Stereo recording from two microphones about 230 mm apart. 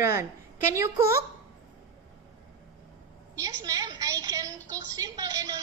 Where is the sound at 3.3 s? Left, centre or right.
Centre.